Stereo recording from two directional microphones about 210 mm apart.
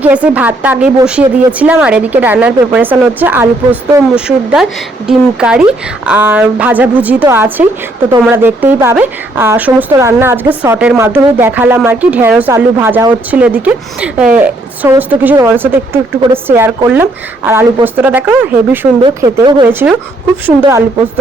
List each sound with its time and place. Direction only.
0.0 s a woman's voice: 5° right (ahead or behind)
19.0 s speech: 20° right (ahead or behind)
19.6 s a woman's voice: 10° right (ahead or behind)